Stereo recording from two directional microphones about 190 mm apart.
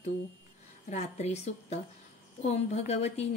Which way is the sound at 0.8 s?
35° left (ahead or behind).